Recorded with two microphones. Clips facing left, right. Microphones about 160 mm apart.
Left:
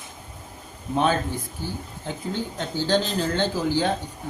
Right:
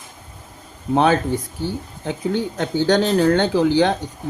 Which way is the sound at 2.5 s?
70° right (ahead or behind).